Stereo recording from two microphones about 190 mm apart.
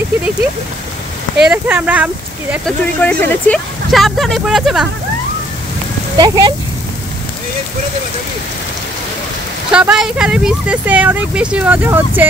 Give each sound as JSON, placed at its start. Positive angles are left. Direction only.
{"t": 1.4, "sound": "speech", "side_deg": -5}
{"t": 2.6, "sound": "speech", "side_deg": 10}
{"t": 6.1, "sound": "speech", "side_deg": -20}
{"t": 9.7, "sound": "speech", "side_deg": -5}